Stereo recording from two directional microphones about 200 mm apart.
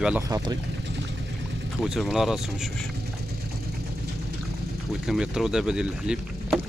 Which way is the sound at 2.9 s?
55° right (ahead or behind).